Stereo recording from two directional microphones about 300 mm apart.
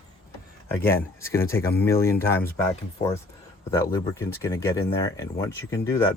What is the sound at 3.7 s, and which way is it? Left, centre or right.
Speech, centre.